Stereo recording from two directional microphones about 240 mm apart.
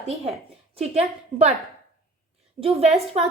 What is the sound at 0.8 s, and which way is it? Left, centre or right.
Speech, right.